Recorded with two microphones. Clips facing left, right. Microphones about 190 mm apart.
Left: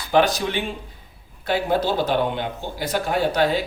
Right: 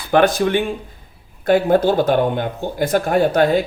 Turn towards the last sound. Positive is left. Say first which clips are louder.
# right 6 dB
turn(degrees=-50)  # may be behind; listen again after turning